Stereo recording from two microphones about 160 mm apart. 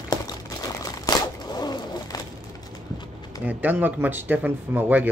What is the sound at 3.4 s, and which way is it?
Speech, 10° right (ahead or behind).